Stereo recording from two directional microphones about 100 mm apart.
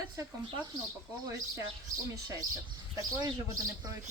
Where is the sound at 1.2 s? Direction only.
35° right (ahead or behind).